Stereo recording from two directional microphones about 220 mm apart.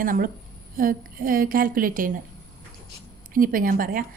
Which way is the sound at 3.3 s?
40° right (ahead or behind).